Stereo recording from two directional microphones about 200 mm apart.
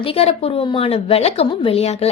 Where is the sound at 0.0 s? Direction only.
30° left (ahead or behind).